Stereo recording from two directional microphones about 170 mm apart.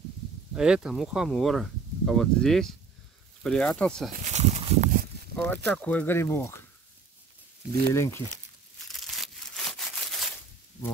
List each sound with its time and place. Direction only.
0.6 s speech: 5° right (ahead or behind)
4.1 s a sound: 45° right (ahead or behind)
5.3 s a sound: 10° left (ahead or behind)
5.7 s speech: 10° left (ahead or behind)
7.9 s speech: 15° left (ahead or behind)
8.7 s crushing: centre (ahead or behind)